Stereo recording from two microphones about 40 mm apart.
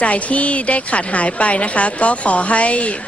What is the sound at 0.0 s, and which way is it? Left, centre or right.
A woman's voice, left.